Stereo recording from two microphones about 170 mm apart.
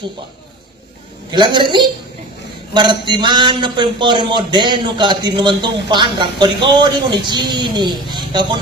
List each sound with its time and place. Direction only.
1.3 s a man's voice: 25° right (ahead or behind)